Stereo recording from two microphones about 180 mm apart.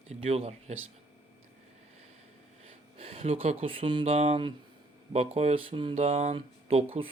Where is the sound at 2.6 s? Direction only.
35° right (ahead or behind).